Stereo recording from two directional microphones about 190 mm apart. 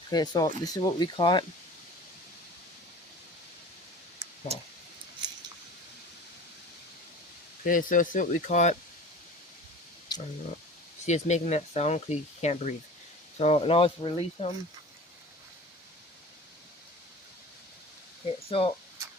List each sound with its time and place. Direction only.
0.1 s speech: 20° left (ahead or behind)
7.6 s speech: 45° left (ahead or behind)
11.0 s speech: 35° left (ahead or behind)
18.4 s speech: 30° left (ahead or behind)